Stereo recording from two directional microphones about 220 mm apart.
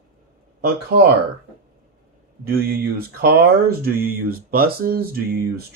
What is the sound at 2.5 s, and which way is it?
Speech, 45° right (ahead or behind).